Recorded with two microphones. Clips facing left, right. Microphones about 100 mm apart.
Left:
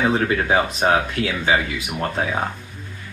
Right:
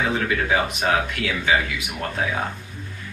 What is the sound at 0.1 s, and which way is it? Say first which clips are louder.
Speech: left 3 dB; 35° left (ahead or behind).